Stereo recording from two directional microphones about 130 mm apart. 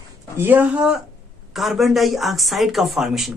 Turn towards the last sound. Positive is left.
turn(degrees=-5)  # may be behind; listen again after turning